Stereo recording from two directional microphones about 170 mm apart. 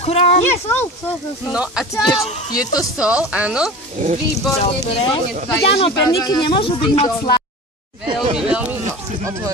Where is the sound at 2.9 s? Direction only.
5° right (ahead or behind).